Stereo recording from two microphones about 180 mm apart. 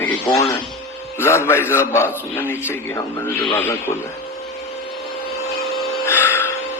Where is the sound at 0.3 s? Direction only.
20° left (ahead or behind).